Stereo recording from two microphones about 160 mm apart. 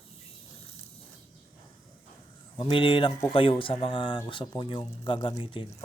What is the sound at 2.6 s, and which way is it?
Speech, 35° left (ahead or behind).